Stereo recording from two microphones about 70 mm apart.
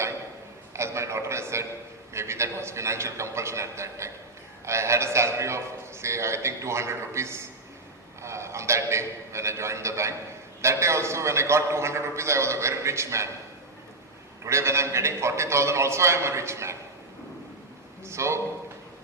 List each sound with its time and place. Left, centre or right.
0.7 s a sound: right
4.6 s a man's voice: right
14.4 s a man's voice: right
18.0 s a man's voice: right